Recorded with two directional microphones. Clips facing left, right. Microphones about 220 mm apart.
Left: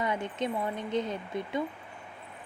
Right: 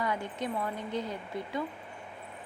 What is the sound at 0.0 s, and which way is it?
A woman's voice, 20° left (ahead or behind).